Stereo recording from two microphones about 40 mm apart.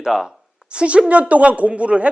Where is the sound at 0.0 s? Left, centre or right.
Centre.